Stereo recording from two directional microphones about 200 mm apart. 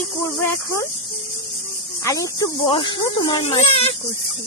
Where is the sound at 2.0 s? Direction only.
15° left (ahead or behind).